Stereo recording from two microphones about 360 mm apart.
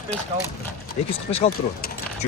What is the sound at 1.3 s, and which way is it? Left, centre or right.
Speech, centre.